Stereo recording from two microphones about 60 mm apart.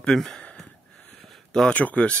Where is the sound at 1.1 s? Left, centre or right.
Centre.